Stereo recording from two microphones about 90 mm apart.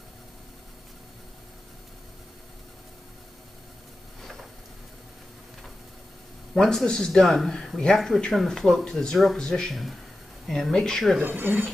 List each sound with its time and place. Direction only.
6.5 s speech: 5° left (ahead or behind)
11.1 s speech: 20° right (ahead or behind)